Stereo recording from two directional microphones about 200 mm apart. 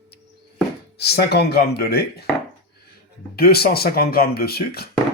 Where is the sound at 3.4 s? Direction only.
50° left (ahead or behind).